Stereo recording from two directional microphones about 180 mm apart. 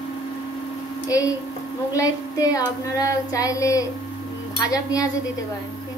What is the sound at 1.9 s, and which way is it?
Child singing, 20° left (ahead or behind).